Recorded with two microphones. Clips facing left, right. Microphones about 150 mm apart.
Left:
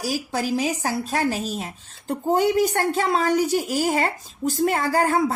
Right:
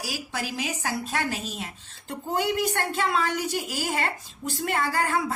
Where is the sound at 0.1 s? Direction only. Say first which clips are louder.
Left 9 dB; 35° left (ahead or behind).